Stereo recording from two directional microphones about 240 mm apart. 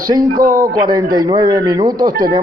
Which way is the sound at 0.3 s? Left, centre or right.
Right.